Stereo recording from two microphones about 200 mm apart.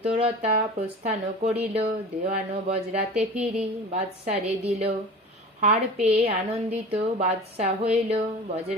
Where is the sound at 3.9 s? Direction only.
30° right (ahead or behind).